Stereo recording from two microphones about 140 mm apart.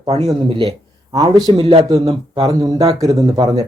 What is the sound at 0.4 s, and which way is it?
Speech, 35° right (ahead or behind).